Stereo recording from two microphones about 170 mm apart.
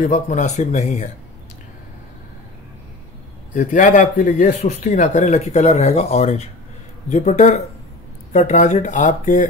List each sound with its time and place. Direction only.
0.0 s speech: 45° left (ahead or behind)
3.5 s speech: 50° left (ahead or behind)